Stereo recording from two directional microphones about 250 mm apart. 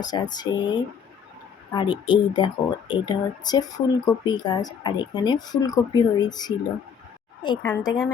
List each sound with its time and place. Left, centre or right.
0.0 s speech: centre
7.6 s speech: centre